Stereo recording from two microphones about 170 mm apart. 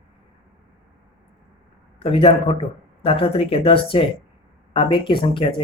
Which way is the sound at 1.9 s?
35° left (ahead or behind).